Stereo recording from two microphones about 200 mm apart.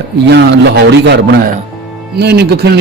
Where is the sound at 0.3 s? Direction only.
60° right (ahead or behind).